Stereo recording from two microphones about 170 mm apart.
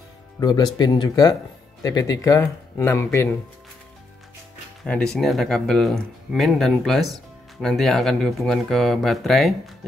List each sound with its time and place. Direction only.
0.4 s speech: 25° left (ahead or behind)
4.8 s speech: 5° left (ahead or behind)